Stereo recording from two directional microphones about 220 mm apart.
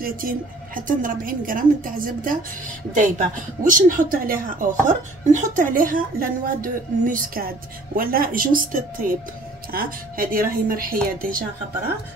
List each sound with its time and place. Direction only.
0.0 s speech: 40° right (ahead or behind)